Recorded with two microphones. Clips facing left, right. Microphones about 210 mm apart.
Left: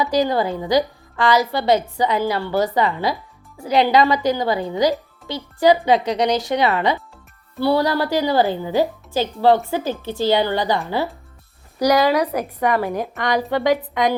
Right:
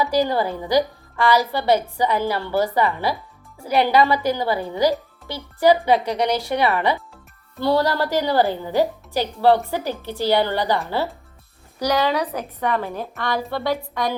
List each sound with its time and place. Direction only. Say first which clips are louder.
0.2 s speech: left 1 dB; 15° left (ahead or behind)